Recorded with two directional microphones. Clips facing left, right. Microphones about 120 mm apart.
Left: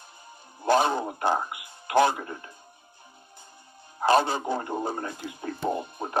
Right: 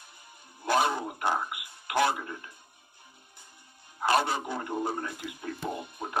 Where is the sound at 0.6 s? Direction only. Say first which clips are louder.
Left 4 dB; 30° left (ahead or behind).